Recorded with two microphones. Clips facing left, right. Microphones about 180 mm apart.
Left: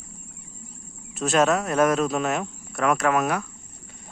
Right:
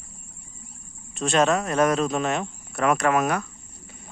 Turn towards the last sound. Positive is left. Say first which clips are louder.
# right 1 dB
turn(degrees=0)  # may be behind; listen again after turning